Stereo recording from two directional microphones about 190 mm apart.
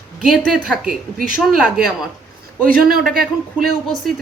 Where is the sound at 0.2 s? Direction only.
5° right (ahead or behind).